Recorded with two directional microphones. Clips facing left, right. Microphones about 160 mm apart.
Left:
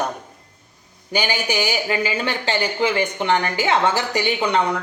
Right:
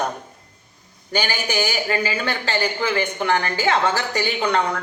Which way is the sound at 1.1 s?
15° left (ahead or behind).